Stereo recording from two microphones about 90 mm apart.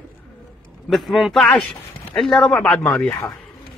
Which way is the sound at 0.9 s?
Centre (ahead or behind).